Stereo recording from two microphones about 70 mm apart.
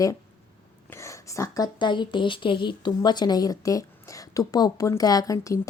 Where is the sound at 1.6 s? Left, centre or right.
Left.